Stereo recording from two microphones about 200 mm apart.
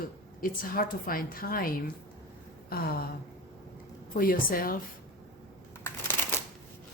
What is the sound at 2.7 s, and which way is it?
Speech, 50° left (ahead or behind).